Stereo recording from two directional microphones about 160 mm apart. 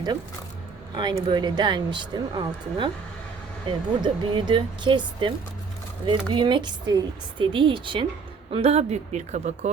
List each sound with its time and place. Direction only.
1.3 s speech: 25° right (ahead or behind); by 9.7 s 45° right (ahead or behind)